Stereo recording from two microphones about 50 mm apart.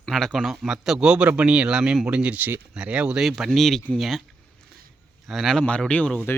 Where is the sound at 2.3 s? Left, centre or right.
Right.